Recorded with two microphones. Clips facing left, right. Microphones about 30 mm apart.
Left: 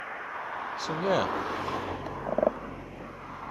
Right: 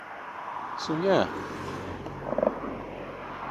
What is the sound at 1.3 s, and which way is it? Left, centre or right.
Vehicle, left.